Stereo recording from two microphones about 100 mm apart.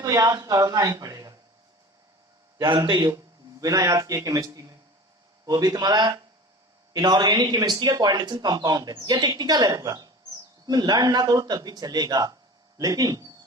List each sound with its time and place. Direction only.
0.0 s speech: 40° right (ahead or behind)
2.6 s speech: 55° right (ahead or behind)
3.6 s a man's voice: 35° right (ahead or behind)